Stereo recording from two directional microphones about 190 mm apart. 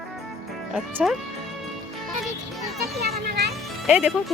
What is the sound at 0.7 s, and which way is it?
Speech, 5° right (ahead or behind).